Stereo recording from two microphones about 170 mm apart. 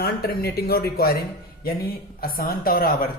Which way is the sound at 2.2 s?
60° left (ahead or behind).